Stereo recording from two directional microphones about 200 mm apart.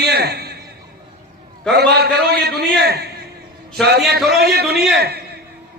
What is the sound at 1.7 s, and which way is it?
A man's voice, 55° right (ahead or behind).